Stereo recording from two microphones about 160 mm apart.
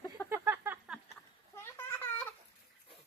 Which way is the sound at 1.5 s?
15° left (ahead or behind).